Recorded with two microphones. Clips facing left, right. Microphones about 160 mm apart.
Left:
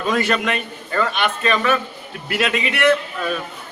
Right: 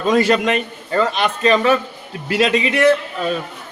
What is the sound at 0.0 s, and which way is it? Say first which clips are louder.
A man's voice: right 5 dB; 30° right (ahead or behind).